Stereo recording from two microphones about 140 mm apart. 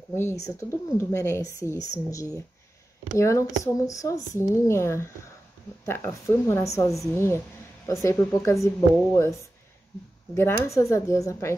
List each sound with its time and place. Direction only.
0.1 s speech: 20° left (ahead or behind)
10.3 s speech: 15° left (ahead or behind)